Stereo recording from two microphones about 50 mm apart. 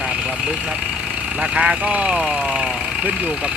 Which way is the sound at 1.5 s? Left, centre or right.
Centre.